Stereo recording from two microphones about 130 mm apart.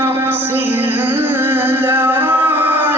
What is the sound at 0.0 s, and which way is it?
Music, 15° right (ahead or behind).